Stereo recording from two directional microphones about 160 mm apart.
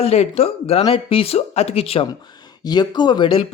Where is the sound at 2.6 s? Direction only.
25° left (ahead or behind).